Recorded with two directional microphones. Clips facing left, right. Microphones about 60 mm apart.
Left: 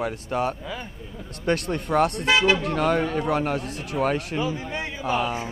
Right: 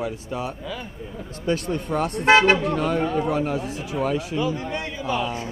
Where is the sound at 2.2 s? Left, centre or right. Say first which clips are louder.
Right 4 dB; right.